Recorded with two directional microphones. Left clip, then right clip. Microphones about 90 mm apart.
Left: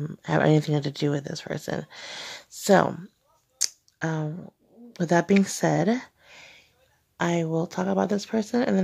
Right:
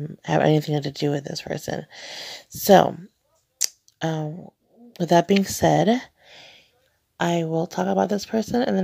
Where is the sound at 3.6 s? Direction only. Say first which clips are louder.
Right 2 dB; 15° right (ahead or behind).